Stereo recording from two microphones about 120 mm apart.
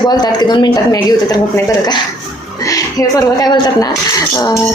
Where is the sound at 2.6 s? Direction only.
30° left (ahead or behind).